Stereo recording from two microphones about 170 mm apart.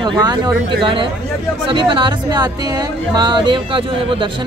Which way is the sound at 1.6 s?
30° right (ahead or behind).